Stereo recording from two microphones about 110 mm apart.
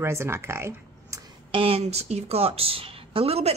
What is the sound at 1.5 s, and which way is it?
Speech, 55° right (ahead or behind).